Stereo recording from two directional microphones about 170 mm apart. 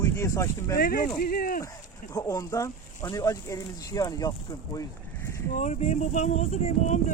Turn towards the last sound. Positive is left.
turn(degrees=45)  # may be behind; listen again after turning